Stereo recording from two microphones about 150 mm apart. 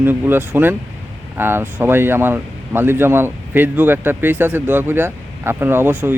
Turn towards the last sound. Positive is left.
turn(degrees=-15)  # may be behind; listen again after turning